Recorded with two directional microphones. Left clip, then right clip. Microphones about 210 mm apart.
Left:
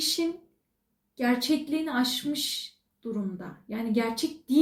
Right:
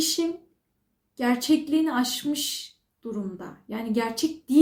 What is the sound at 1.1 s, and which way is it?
Speech, 15° right (ahead or behind).